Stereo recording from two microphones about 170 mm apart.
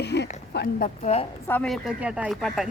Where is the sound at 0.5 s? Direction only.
70° left (ahead or behind).